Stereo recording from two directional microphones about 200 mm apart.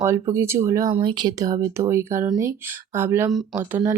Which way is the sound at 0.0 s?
15° right (ahead or behind).